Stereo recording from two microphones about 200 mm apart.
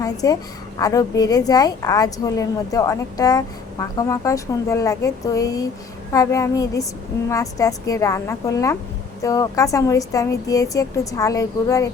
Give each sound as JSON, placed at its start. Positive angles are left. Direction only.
{"t": 0.0, "sound": "a woman's voice", "side_deg": 15}